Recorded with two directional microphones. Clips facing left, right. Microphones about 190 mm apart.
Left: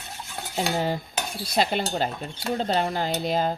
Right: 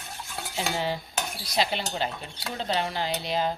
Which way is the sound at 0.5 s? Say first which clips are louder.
Left 4 dB; 45° left (ahead or behind).